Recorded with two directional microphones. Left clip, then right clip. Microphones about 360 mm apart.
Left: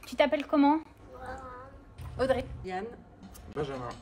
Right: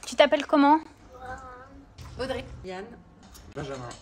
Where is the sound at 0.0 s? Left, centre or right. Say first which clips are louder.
Right 6 dB; right.